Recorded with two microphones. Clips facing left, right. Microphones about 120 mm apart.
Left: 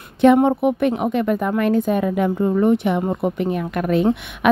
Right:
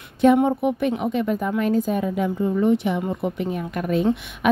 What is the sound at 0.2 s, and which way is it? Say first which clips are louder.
A woman's voice: left 3 dB; 70° left (ahead or behind).